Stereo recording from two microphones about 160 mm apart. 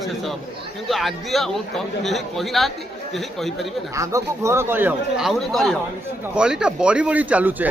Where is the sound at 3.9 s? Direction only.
20° right (ahead or behind).